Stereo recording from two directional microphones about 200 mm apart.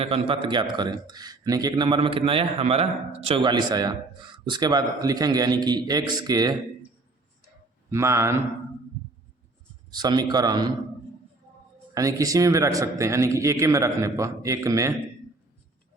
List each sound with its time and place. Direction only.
0.0 s speech: 25° right (ahead or behind)
7.9 s a man's voice: 15° right (ahead or behind)
9.9 s speech: 20° right (ahead or behind)
11.9 s a man's voice: 15° right (ahead or behind)